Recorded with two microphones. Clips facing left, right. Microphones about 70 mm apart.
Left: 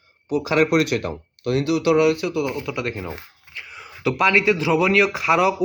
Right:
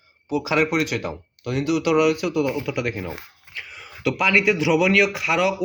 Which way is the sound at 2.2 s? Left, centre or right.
Right.